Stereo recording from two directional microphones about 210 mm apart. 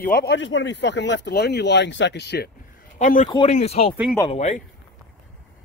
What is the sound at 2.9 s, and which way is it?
A man's voice, 35° left (ahead or behind).